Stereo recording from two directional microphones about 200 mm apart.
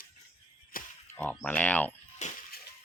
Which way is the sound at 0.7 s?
45° left (ahead or behind).